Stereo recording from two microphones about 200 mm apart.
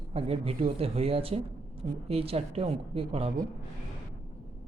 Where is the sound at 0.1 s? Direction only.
30° right (ahead or behind).